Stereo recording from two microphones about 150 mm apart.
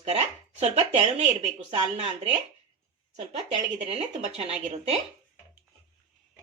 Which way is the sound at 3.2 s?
45° right (ahead or behind).